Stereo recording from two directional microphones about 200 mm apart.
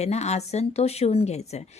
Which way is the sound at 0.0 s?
35° left (ahead or behind).